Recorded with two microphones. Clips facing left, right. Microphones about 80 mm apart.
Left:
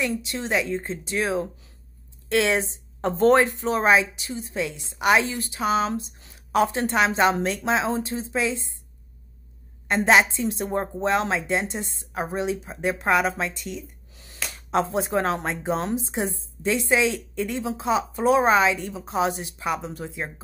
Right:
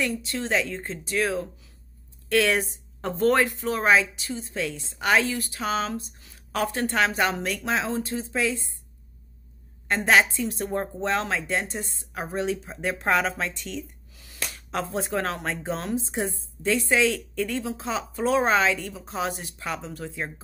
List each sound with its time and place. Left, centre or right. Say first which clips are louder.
0.0 s speech: left 1 dB; centre
9.8 s a woman's voice: left 2 dB; left
14.1 s speech: even; left